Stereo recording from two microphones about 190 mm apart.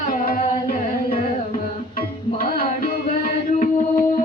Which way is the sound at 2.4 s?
50° left (ahead or behind).